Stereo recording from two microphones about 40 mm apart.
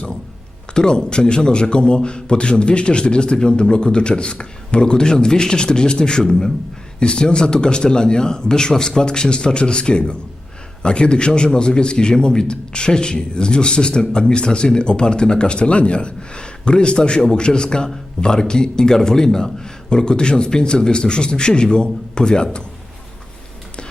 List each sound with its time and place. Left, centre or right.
0.7 s a man's voice: centre